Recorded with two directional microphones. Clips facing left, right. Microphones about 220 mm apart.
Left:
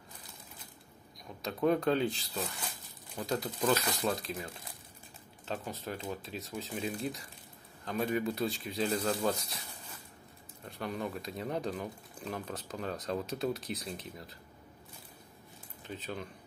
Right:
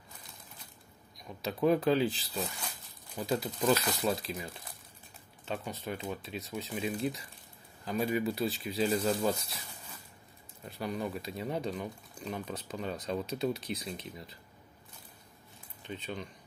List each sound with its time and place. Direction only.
1.4 s speech: 5° right (ahead or behind)
10.6 s speech: centre (ahead or behind)
15.9 s speech: 5° left (ahead or behind)